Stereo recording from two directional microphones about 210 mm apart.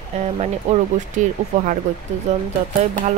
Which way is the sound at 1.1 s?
35° right (ahead or behind).